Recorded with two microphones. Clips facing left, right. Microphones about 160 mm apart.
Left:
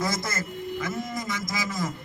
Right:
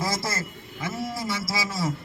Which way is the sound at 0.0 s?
30° right (ahead or behind).